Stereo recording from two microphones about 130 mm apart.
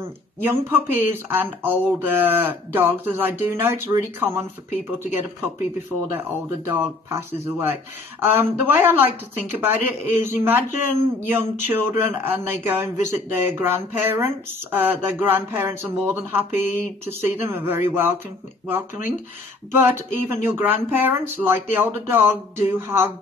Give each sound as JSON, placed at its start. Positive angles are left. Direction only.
{"t": 0.0, "sound": "speech", "side_deg": -15}
{"t": 19.8, "sound": "speech", "side_deg": -15}